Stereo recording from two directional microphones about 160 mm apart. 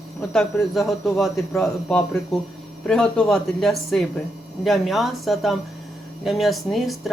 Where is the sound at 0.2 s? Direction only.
5° left (ahead or behind).